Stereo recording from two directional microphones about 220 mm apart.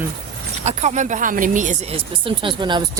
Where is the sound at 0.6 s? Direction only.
30° right (ahead or behind).